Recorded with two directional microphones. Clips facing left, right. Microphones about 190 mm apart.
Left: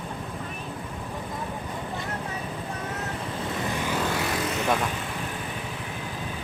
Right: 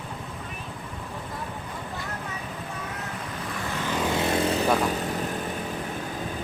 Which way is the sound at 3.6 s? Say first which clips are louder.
Right 1 dB; 15° left (ahead or behind).